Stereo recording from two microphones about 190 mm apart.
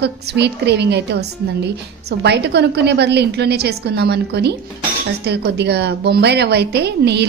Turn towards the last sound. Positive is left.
turn(degrees=-60)  # may be behind; listen again after turning